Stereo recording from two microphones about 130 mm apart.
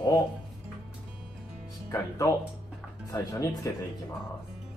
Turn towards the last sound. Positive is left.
turn(degrees=25)  # may be behind; listen again after turning